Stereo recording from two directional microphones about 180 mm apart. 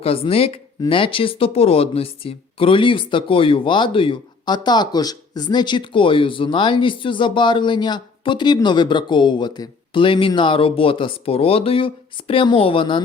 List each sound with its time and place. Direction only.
0.0 s speech: 30° left (ahead or behind)